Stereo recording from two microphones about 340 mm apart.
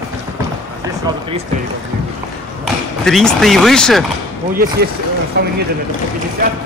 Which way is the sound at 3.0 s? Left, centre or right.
Centre.